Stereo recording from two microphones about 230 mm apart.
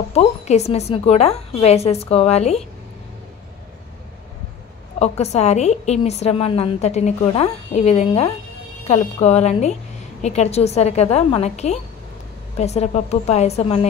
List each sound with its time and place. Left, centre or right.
0.1 s a woman's voice: left
4.9 s a woman's voice: left